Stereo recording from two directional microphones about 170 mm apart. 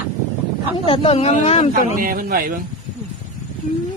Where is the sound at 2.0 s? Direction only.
55° right (ahead or behind).